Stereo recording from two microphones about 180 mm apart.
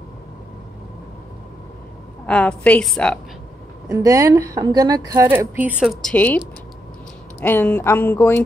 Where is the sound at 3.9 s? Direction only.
15° right (ahead or behind); by 6.4 s 10° left (ahead or behind).